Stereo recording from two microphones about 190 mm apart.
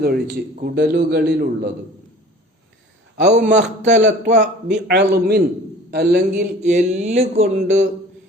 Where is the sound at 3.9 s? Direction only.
40° right (ahead or behind).